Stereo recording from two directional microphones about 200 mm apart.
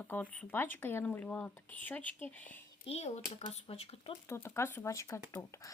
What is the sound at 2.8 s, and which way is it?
Speech, 30° left (ahead or behind).